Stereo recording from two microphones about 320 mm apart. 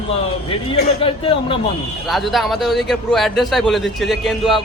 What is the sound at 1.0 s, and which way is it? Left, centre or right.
Speech, centre.